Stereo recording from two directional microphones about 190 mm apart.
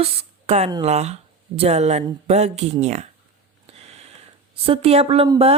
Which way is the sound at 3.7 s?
30° right (ahead or behind).